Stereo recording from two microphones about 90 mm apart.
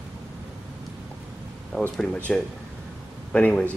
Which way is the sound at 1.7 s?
15° left (ahead or behind).